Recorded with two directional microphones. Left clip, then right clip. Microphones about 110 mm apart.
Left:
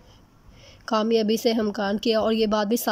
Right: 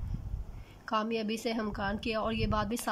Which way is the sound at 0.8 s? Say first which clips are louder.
Left 10 dB; 45° left (ahead or behind).